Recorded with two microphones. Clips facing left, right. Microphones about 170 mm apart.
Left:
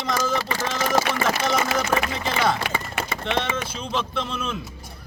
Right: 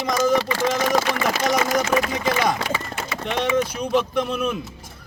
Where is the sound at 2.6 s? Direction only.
60° left (ahead or behind).